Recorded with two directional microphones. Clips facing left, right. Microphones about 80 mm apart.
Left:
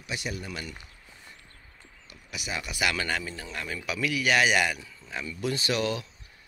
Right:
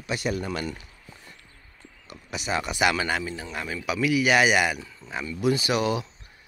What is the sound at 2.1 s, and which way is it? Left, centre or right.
Speech, right.